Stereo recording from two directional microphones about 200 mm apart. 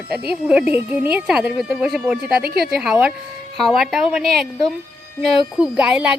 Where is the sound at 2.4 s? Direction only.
50° right (ahead or behind).